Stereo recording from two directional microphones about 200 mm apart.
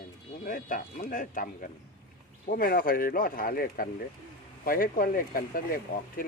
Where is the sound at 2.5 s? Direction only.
45° left (ahead or behind).